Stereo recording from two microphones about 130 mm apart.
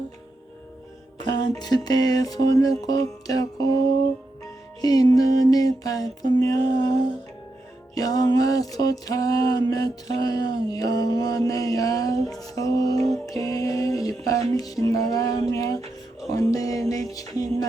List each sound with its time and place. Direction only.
1.2 s music: 35° left (ahead or behind)
4.8 s music: 30° left (ahead or behind)